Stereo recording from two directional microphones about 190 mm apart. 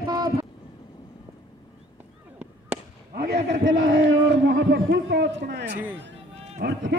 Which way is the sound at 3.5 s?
75° right (ahead or behind).